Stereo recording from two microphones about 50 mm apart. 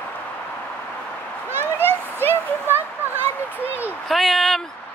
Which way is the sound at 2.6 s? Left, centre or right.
Right.